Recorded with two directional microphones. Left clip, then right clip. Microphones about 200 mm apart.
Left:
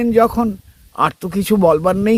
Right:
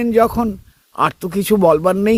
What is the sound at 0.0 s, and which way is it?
Speech, 20° right (ahead or behind).